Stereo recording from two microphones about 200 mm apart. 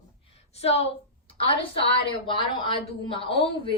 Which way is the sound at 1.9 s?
25° left (ahead or behind).